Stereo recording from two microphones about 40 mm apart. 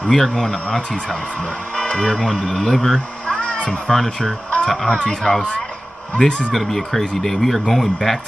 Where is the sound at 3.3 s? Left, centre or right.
Left.